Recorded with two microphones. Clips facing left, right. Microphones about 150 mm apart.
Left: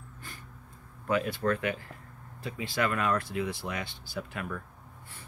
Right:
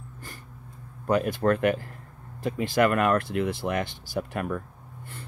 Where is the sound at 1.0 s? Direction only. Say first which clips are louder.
Right 5 dB; 45° right (ahead or behind).